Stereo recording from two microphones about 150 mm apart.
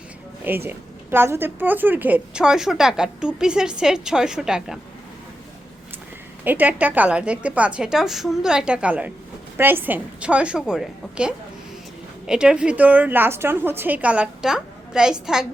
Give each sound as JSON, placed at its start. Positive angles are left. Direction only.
{"t": 0.4, "sound": "a woman's voice", "side_deg": -15}
{"t": 6.4, "sound": "a woman's voice", "side_deg": -10}